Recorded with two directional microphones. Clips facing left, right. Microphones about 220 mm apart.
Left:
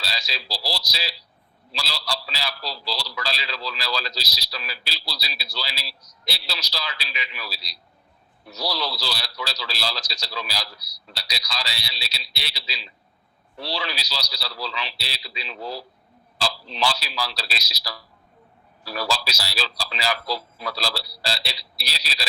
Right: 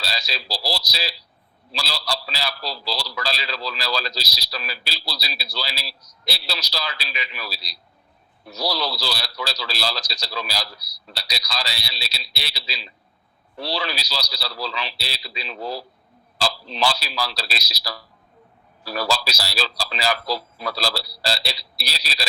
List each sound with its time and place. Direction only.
0.0 s a man's voice: 35° right (ahead or behind)